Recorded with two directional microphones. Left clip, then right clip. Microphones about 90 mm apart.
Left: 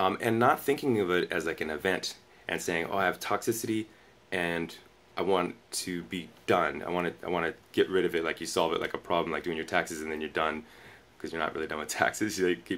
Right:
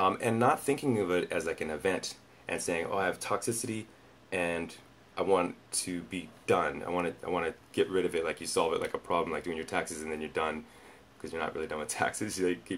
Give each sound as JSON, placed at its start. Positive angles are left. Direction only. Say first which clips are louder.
{"t": 0.0, "sound": "speech", "louder": "left 1 dB", "side_deg": 5}